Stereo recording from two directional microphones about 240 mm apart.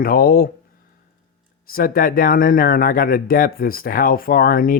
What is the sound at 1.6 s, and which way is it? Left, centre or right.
Speech, left.